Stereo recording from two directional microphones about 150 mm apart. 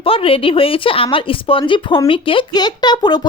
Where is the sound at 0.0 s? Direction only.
40° left (ahead or behind).